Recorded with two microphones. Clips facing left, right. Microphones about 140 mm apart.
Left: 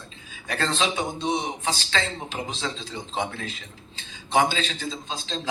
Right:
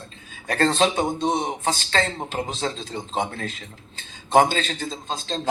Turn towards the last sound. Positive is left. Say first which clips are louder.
# right 3 dB
turn(degrees=-50)  # may be behind; listen again after turning